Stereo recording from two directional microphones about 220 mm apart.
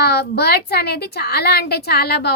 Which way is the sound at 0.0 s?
45° left (ahead or behind).